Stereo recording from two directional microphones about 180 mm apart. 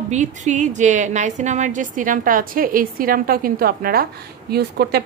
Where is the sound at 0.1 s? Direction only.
40° right (ahead or behind).